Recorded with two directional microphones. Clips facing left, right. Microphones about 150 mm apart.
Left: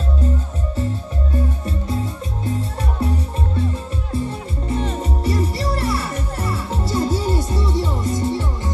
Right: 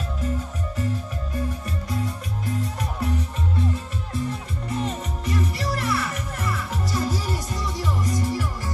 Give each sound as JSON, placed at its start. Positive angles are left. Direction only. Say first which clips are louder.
{"t": 1.3, "sound": "music", "louder": "left 5 dB", "side_deg": 25}